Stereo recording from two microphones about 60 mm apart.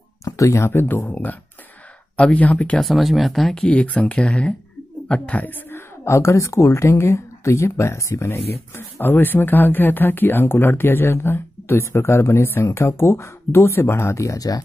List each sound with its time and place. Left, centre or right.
0.2 s speech: left
1.0 s speech: left
2.8 s speech: centre
3.6 s speech: centre; by 5.9 s left
6.0 s speech: left